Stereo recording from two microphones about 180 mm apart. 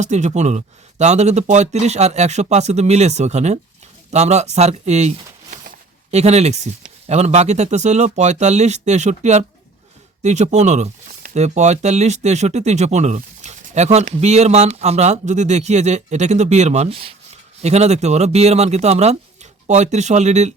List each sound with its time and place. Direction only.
0.0 s speech: 40° right (ahead or behind)